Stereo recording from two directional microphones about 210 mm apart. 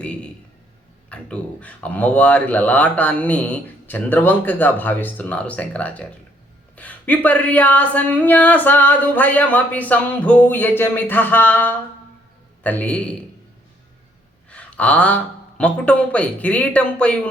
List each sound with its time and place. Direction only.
0.0 s a man's voice: 5° left (ahead or behind)
14.5 s speech: 5° left (ahead or behind)